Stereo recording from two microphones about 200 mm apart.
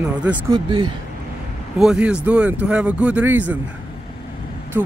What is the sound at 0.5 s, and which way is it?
Speech, 20° right (ahead or behind).